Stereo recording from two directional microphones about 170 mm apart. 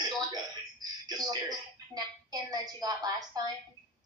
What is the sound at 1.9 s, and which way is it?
A woman's voice, 20° right (ahead or behind).